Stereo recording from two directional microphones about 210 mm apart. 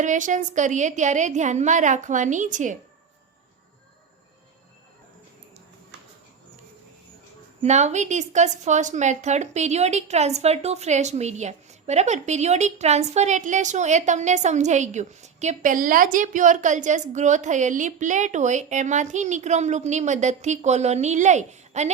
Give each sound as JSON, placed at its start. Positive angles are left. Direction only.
{"t": 0.0, "sound": "a woman's voice", "side_deg": -35}
{"t": 7.6, "sound": "a woman's voice", "side_deg": -30}